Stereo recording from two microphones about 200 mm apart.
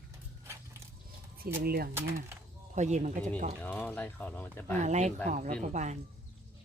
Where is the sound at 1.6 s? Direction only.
50° right (ahead or behind).